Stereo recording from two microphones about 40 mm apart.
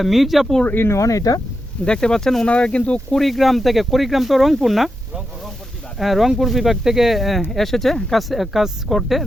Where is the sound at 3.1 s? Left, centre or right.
Centre.